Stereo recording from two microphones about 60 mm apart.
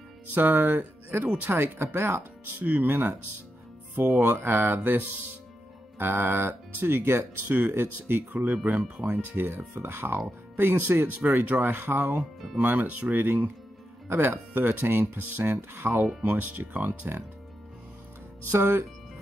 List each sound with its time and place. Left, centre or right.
0.3 s speech: right
1.5 s speech: right
1.9 s speech: right
8.3 s speech: right
8.7 s speech: centre
9.3 s speech: right
12.2 s speech: centre
12.5 s speech: right
16.2 s speech: right
18.5 s speech: right